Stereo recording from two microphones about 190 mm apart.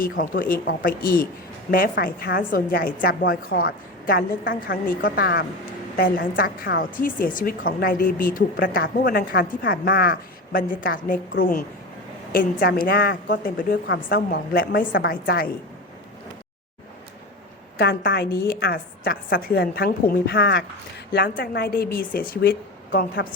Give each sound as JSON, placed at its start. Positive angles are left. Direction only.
{"t": 0.0, "sound": "a woman's voice", "side_deg": 50}
{"t": 12.3, "sound": "a woman's voice", "side_deg": 50}
{"t": 17.7, "sound": "a woman's voice", "side_deg": 55}